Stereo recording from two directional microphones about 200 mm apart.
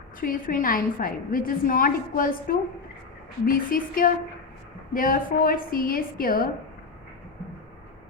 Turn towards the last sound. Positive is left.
turn(degrees=45)  # may be behind; listen again after turning